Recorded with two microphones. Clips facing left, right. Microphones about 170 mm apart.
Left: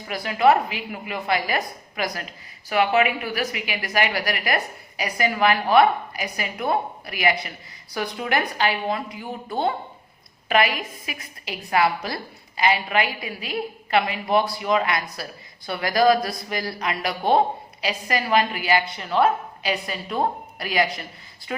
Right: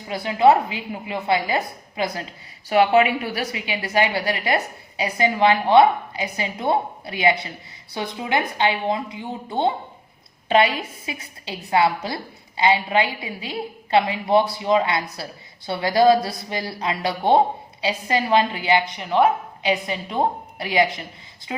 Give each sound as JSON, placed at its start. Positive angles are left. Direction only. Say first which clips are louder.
{"t": 0.1, "sound": "a woman's voice", "louder": "right 2 dB", "side_deg": -25}